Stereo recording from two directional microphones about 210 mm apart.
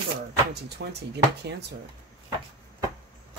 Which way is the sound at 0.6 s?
55° right (ahead or behind).